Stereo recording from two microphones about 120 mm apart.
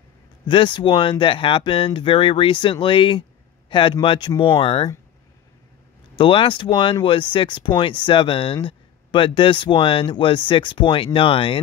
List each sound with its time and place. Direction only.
0.5 s speech: 40° left (ahead or behind)
6.1 s speech: 45° left (ahead or behind)